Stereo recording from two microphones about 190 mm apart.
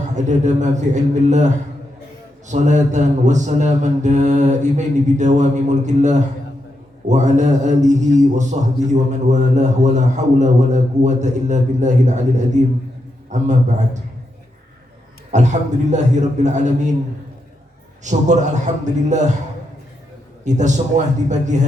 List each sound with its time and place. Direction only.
0.2 s mantra: 40° right (ahead or behind)
15.3 s mantra: 40° right (ahead or behind)
18.0 s mantra: 40° right (ahead or behind)
20.4 s mantra: 40° right (ahead or behind)